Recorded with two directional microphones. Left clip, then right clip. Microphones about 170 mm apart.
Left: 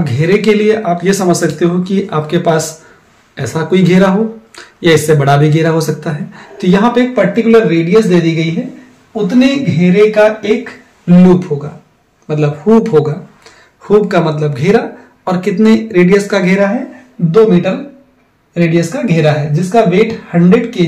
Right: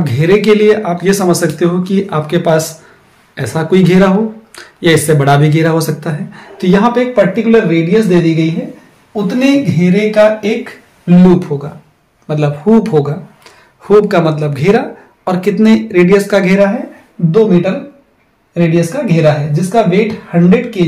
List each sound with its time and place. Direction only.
0.0 s speech: 25° right (ahead or behind)